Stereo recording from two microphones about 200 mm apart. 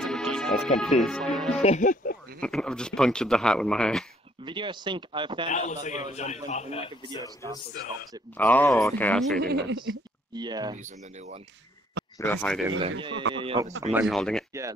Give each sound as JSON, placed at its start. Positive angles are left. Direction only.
{"t": 0.0, "sound": "speech", "side_deg": 0}
{"t": 1.6, "sound": "speech", "side_deg": 35}
{"t": 2.4, "sound": "a man's voice", "side_deg": 5}
{"t": 4.5, "sound": "speech", "side_deg": -25}
{"t": 5.5, "sound": "a man's voice", "side_deg": 35}
{"t": 8.4, "sound": "speech", "side_deg": 10}
{"t": 9.4, "sound": "speech", "side_deg": -55}
{"t": 10.3, "sound": "speech", "side_deg": -20}
{"t": 10.8, "sound": "speech", "side_deg": -35}
{"t": 12.2, "sound": "speech", "side_deg": 10}
{"t": 12.6, "sound": "speech", "side_deg": -25}
{"t": 13.9, "sound": "a man's voice", "side_deg": 0}